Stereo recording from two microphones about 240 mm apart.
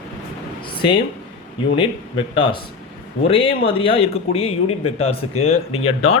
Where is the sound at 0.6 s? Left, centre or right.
Left.